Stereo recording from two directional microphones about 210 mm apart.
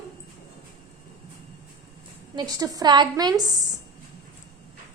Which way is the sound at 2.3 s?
20° right (ahead or behind).